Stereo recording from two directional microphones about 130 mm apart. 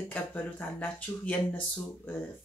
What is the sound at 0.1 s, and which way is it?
Speech, 15° left (ahead or behind).